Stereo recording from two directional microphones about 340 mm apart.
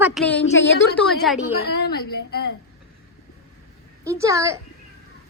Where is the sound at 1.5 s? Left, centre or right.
Left.